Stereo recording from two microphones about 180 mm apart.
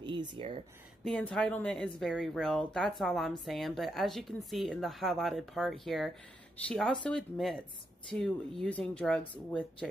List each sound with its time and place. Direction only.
0.0 s speech: 25° right (ahead or behind)
1.0 s speech: 5° left (ahead or behind)